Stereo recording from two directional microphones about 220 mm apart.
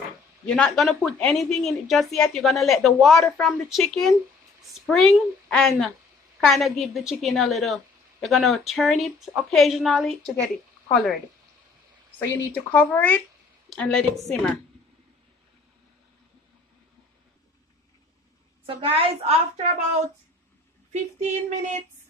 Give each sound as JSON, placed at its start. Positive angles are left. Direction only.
{"t": 0.6, "sound": "a woman's voice", "side_deg": 0}
{"t": 12.2, "sound": "a woman's voice", "side_deg": 10}
{"t": 18.7, "sound": "a woman's voice", "side_deg": -25}
{"t": 20.9, "sound": "female singing", "side_deg": -30}